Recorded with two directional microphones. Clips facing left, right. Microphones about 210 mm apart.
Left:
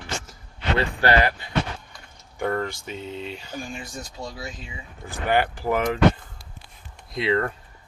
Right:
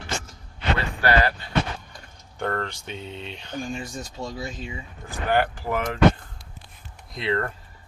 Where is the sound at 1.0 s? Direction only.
20° left (ahead or behind).